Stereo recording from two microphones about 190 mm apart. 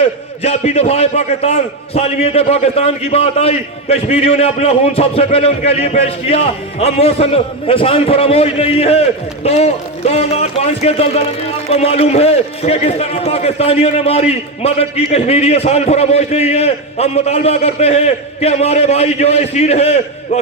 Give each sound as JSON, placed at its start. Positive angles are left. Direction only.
{"t": 0.0, "sound": "a man's voice", "side_deg": 35}